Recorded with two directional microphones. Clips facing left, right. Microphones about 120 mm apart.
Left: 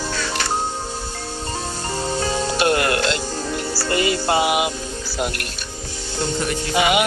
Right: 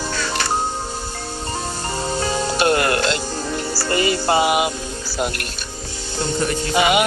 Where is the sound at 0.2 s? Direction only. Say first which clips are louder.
Right 1 dB; 40° right (ahead or behind).